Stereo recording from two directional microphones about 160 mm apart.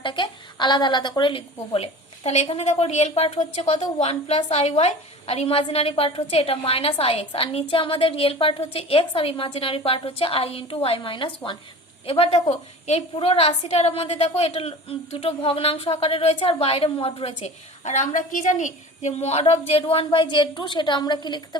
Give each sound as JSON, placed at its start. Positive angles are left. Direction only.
{"t": 0.0, "sound": "a woman's voice", "side_deg": 30}